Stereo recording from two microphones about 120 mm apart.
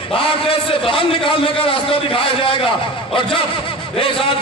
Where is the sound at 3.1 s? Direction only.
45° left (ahead or behind).